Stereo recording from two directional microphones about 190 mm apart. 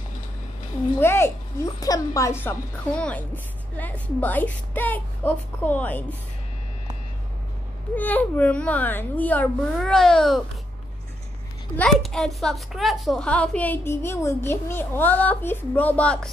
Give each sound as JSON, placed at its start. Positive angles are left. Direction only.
{"t": 0.9, "sound": "a woman's voice", "side_deg": 10}
{"t": 7.9, "sound": "a woman's voice", "side_deg": 10}
{"t": 11.7, "sound": "a woman's voice", "side_deg": 5}